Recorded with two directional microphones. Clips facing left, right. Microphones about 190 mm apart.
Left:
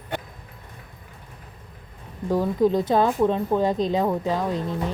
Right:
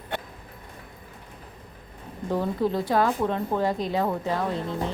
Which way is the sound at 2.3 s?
15° left (ahead or behind).